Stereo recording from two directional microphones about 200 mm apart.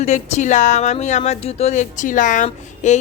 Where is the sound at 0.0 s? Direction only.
35° left (ahead or behind).